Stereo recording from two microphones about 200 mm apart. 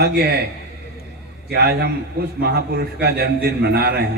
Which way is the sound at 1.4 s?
50° right (ahead or behind).